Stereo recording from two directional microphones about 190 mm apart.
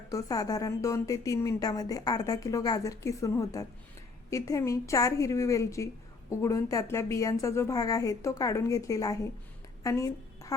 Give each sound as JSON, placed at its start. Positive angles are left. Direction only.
{"t": 0.1, "sound": "a woman's voice", "side_deg": 20}